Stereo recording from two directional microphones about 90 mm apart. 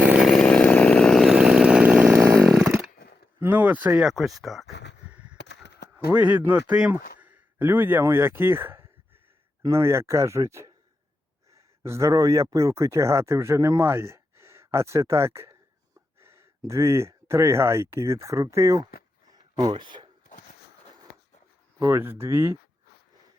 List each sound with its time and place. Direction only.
0.2 s chainsaw: centre (ahead or behind); by 2.2 s 15° right (ahead or behind)
2.2 s chainsaw: 35° right (ahead or behind)
2.5 s chainsaw: 5° right (ahead or behind)
3.4 s a sound: 20° right (ahead or behind)
4.0 s speech: centre (ahead or behind)
6.1 s speech: 20° right (ahead or behind)
6.9 s a sound: 20° right (ahead or behind)
8.0 s speech: 25° right (ahead or behind)
19.3 s a sound: 45° right (ahead or behind)
19.7 s speech: 60° right (ahead or behind)
21.8 s speech: 30° right (ahead or behind)